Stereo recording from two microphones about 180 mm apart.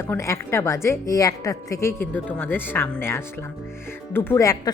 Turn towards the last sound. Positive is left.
turn(degrees=20)  # may be behind; listen again after turning